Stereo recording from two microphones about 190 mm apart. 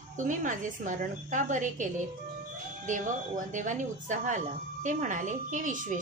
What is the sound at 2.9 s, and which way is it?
A woman's voice, 40° right (ahead or behind).